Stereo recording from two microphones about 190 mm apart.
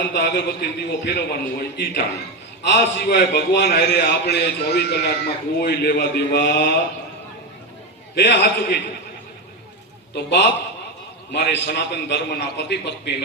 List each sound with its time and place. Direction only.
0.1 s a man's voice: 60° left (ahead or behind)
8.1 s a man's voice: 70° left (ahead or behind)
10.2 s a man's voice: 60° left (ahead or behind)